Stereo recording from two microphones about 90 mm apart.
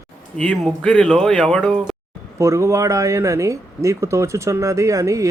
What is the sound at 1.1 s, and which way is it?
Speech, 10° left (ahead or behind).